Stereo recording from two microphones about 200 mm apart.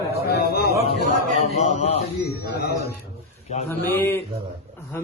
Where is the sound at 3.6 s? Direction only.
10° left (ahead or behind).